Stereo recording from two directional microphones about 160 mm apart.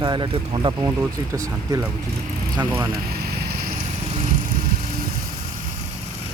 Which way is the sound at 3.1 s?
75° right (ahead or behind).